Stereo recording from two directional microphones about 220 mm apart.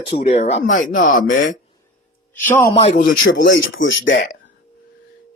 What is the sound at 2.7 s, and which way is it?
Speech, 25° left (ahead or behind).